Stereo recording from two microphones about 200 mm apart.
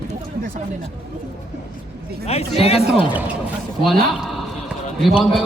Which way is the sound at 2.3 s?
30° left (ahead or behind).